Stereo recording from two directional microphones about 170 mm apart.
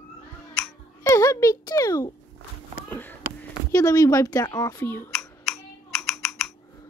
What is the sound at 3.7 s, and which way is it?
A woman's voice, 20° left (ahead or behind).